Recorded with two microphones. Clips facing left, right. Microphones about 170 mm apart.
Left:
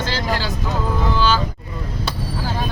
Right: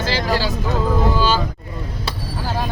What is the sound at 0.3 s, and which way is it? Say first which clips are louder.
Speech: right 3 dB; centre (ahead or behind).